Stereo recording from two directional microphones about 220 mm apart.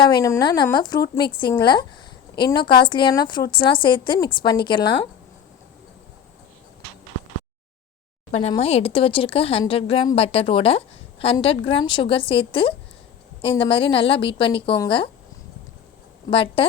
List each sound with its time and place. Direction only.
0.0 s speech: 15° left (ahead or behind)
8.3 s speech: 30° left (ahead or behind)
16.3 s speech: 25° left (ahead or behind)